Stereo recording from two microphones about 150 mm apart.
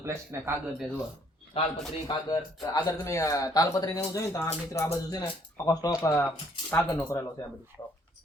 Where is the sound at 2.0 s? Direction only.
25° left (ahead or behind).